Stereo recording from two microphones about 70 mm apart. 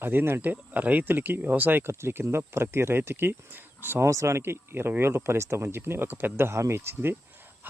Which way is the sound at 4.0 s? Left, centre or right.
Right.